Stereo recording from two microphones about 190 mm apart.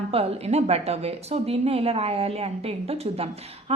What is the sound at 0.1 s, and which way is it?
A woman's voice, 30° right (ahead or behind).